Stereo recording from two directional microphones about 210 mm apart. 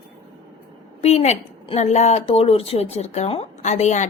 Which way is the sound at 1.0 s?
30° left (ahead or behind).